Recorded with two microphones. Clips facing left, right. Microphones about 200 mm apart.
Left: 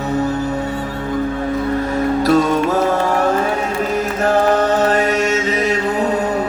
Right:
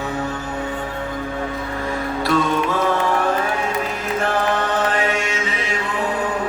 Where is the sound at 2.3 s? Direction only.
40° left (ahead or behind).